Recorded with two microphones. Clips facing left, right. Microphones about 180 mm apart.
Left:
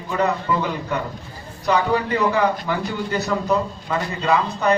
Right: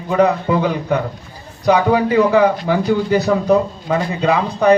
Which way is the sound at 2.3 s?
65° right (ahead or behind).